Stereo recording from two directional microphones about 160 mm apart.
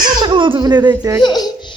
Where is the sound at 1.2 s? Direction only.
25° left (ahead or behind).